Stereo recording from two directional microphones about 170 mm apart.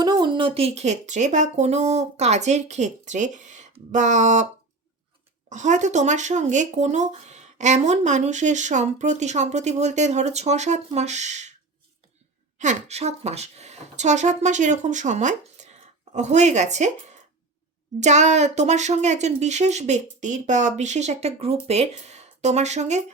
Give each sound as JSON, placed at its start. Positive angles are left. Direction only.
{"t": 0.0, "sound": "speech", "side_deg": -25}
{"t": 5.5, "sound": "speech", "side_deg": -45}
{"t": 12.5, "sound": "speech", "side_deg": -40}